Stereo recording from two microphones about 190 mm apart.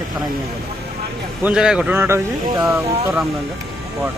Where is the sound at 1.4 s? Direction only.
5° right (ahead or behind).